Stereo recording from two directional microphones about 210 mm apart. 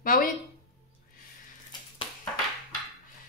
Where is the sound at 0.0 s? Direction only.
40° left (ahead or behind).